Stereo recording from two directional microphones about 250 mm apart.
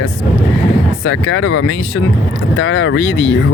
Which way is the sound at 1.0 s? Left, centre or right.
Left.